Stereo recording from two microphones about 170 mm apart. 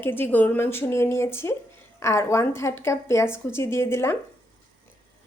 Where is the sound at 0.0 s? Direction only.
10° left (ahead or behind).